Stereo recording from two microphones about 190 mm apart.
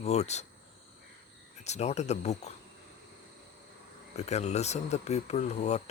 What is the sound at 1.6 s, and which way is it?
Speech, 35° left (ahead or behind).